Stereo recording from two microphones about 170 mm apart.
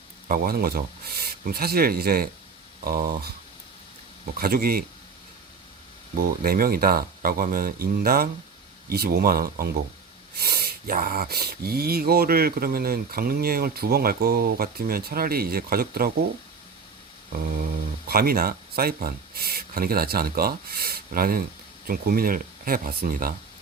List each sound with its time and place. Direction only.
0.3 s speech: 60° right (ahead or behind)
4.4 s speech: 60° right (ahead or behind)
6.1 s speech: 60° right (ahead or behind)
18.1 s speech: 60° right (ahead or behind)